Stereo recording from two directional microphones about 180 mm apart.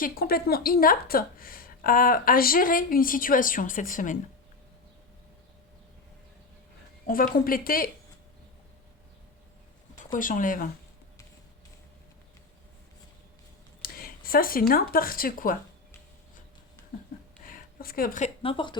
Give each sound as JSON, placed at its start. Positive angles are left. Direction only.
{"t": 0.0, "sound": "speech", "side_deg": 55}
{"t": 7.3, "sound": "speech", "side_deg": 55}
{"t": 10.0, "sound": "speech", "side_deg": 45}
{"t": 13.8, "sound": "a sound", "side_deg": 55}
{"t": 14.7, "sound": "speech", "side_deg": 55}
{"t": 17.4, "sound": "a sound", "side_deg": 50}
{"t": 18.4, "sound": "speech", "side_deg": 25}